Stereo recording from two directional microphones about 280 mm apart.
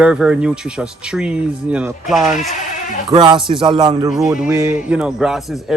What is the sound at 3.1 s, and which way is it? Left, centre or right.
Speech, centre.